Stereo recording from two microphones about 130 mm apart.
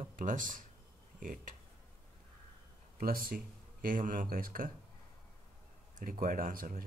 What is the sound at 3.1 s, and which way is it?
Speech, 90° right.